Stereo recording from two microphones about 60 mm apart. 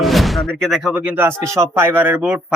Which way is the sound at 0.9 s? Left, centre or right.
Right.